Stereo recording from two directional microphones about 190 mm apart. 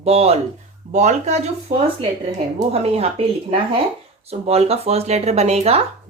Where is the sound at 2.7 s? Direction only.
35° right (ahead or behind).